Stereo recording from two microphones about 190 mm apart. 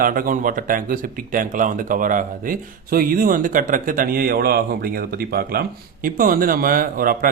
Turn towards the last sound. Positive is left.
turn(degrees=-50)  # may be behind; listen again after turning